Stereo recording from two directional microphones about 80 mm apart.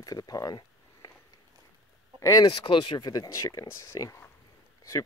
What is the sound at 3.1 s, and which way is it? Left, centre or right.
Speech, left.